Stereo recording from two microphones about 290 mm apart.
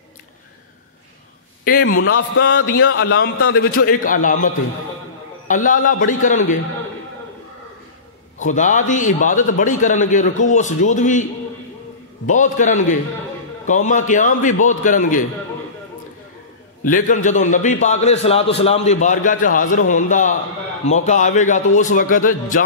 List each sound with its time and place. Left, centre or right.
2.0 s speech: left
2.5 s a man's voice: left
3.3 s speech: left
3.8 s a man's voice: left
5.5 s a man's voice: left
8.4 s a man's voice: left
12.3 s a man's voice: left
16.8 s a man's voice: left